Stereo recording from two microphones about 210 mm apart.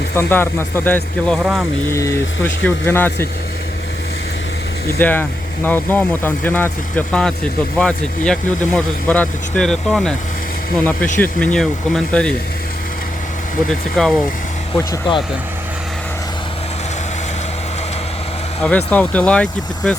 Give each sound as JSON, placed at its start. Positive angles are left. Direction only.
{"t": 0.2, "sound": "speech", "side_deg": 10}
{"t": 1.9, "sound": "speech", "side_deg": 15}
{"t": 4.9, "sound": "speech", "side_deg": 10}
{"t": 13.7, "sound": "speech", "side_deg": 0}
{"t": 14.8, "sound": "speech", "side_deg": 20}
{"t": 18.9, "sound": "speech", "side_deg": 5}